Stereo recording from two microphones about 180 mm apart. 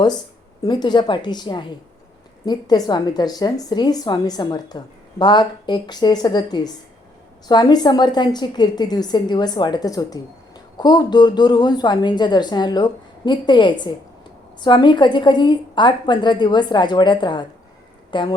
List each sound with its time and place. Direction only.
0.6 s a woman's voice: 25° left (ahead or behind)